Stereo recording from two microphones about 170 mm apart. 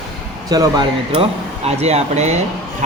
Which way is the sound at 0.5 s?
30° right (ahead or behind).